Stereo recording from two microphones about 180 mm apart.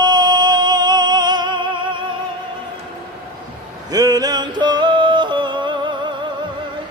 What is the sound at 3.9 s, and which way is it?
Music, 20° right (ahead or behind).